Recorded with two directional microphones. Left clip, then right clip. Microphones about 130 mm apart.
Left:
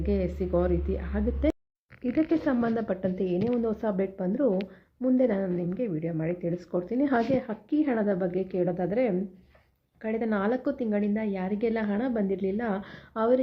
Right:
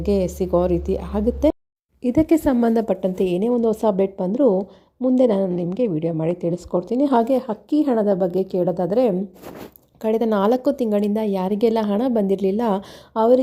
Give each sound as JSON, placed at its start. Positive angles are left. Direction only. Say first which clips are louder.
{"t": 0.0, "sound": "a woman's voice", "louder": "right 8 dB", "side_deg": -45}
{"t": 6.8, "sound": "a woman's voice", "louder": "right 8 dB", "side_deg": -40}
{"t": 13.1, "sound": "a woman's voice", "louder": "right 9 dB", "side_deg": -40}